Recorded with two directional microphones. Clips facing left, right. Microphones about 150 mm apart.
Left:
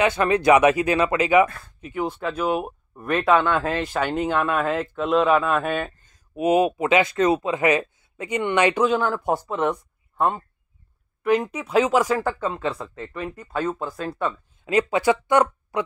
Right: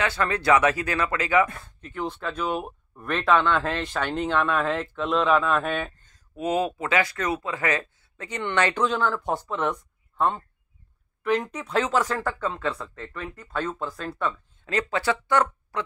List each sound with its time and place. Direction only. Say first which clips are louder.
0.0 s speech: left 6 dB; 20° left (ahead or behind)